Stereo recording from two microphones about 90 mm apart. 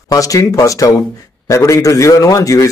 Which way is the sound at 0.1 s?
40° left (ahead or behind).